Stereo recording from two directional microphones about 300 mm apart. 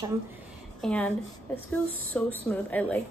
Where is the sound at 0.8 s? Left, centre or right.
Centre.